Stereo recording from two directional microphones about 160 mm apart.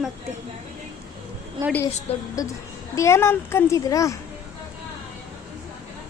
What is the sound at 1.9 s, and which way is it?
Speech, 40° left (ahead or behind).